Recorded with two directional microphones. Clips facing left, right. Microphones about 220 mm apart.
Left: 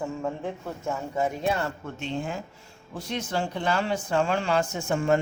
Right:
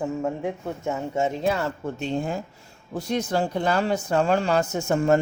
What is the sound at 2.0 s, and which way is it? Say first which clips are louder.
Speech: right 3 dB; 35° right (ahead or behind).